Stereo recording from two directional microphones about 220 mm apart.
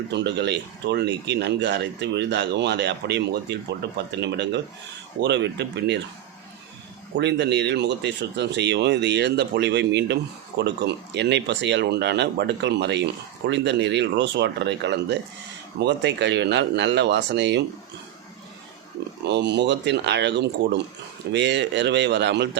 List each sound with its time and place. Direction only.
0.1 s speech: 50° right (ahead or behind)
7.2 s speech: 50° right (ahead or behind)
19.2 s speech: 50° right (ahead or behind)